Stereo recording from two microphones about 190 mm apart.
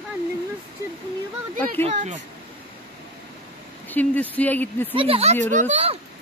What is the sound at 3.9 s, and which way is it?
Speech, 10° left (ahead or behind).